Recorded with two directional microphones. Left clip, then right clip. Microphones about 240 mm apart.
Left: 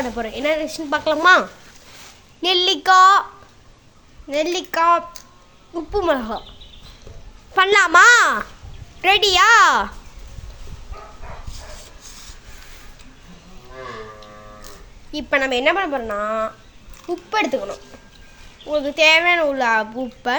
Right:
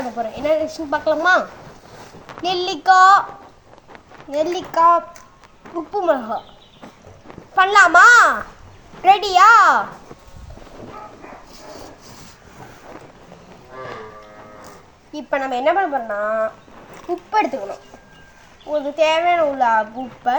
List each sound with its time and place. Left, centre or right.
0.2 s speech: left
4.3 s speech: left
7.5 s speech: left
15.1 s speech: left
17.3 s speech: left